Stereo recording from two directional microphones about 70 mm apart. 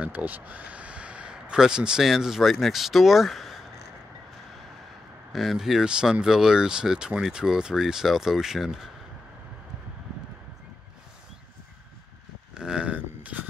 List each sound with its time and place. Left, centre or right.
0.0 s speech: right; by 3.5 s centre
5.3 s speech: centre
12.5 s a sound: centre